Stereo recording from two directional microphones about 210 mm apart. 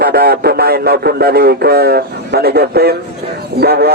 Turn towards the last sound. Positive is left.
turn(degrees=-50)  # may be behind; listen again after turning